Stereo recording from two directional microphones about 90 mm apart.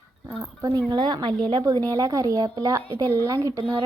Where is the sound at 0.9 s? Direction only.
50° right (ahead or behind).